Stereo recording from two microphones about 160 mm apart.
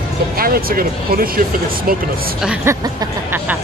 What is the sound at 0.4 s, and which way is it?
Speech, 70° right (ahead or behind).